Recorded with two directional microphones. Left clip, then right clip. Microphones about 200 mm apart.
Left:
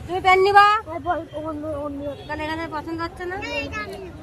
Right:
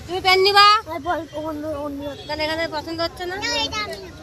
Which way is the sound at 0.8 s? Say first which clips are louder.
Right 1 dB; 55° right (ahead or behind).